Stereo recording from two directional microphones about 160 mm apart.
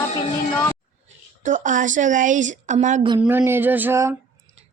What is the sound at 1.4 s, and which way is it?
Speech, 50° right (ahead or behind).